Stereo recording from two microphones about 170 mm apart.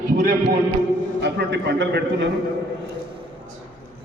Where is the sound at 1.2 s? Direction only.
85° right.